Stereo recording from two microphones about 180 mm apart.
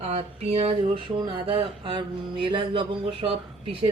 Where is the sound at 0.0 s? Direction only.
35° right (ahead or behind).